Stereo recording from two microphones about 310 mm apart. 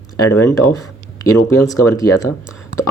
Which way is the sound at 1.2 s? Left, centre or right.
Centre.